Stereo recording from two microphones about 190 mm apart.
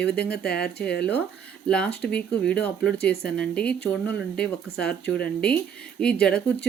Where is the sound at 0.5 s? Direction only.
5° left (ahead or behind).